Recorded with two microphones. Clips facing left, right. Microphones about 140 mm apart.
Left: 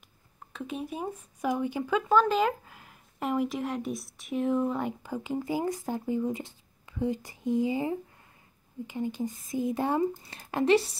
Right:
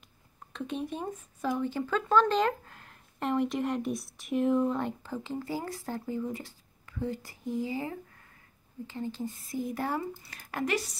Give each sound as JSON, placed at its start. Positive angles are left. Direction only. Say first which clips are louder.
{"t": 0.5, "sound": "speech", "louder": "right 1 dB", "side_deg": 5}